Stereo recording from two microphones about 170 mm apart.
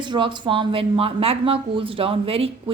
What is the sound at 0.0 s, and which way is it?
Speech, 30° right (ahead or behind).